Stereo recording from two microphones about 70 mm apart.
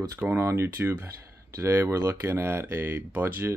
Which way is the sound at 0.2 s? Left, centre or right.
Right.